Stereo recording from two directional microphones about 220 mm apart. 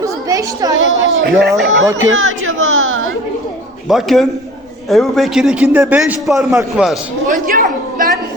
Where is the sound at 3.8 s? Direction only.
Centre (ahead or behind).